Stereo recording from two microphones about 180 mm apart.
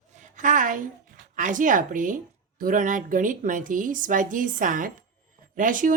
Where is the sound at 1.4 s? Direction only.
45° right (ahead or behind).